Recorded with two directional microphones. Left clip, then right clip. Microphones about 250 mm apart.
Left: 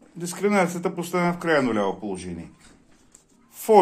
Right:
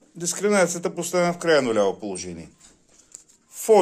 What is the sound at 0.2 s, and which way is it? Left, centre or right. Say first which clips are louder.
Speech: right 2 dB; right.